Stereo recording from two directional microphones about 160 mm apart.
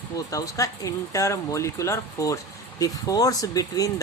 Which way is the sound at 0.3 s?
20° left (ahead or behind).